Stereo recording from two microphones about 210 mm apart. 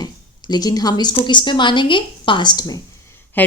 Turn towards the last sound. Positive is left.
turn(degrees=10)  # may be behind; listen again after turning